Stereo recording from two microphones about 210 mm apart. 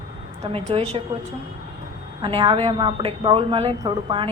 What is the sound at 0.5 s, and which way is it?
Speech, 25° right (ahead or behind).